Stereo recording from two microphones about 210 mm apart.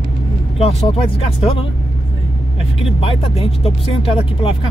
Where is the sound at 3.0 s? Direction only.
25° left (ahead or behind).